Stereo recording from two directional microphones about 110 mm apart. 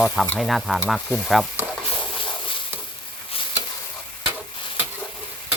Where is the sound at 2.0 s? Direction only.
50° left (ahead or behind).